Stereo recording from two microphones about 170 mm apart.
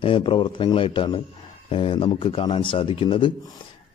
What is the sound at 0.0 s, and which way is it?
A man's voice, 30° left (ahead or behind).